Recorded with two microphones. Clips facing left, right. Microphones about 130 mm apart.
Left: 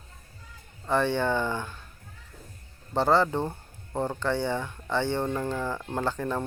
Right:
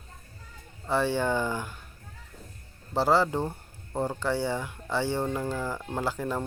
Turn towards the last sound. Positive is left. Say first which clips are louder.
# left 1 dB
turn(degrees=-10)  # may be behind; listen again after turning